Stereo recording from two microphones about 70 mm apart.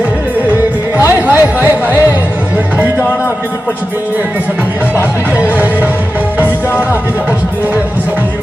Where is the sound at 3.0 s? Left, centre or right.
Left.